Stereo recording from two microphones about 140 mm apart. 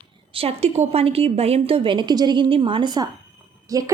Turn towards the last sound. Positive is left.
turn(degrees=-25)  # may be behind; listen again after turning